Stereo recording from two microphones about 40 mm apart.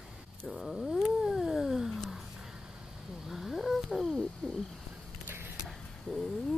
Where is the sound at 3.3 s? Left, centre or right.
Centre.